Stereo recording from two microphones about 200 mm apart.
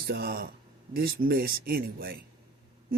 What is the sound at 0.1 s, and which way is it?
Speech, 50° right (ahead or behind).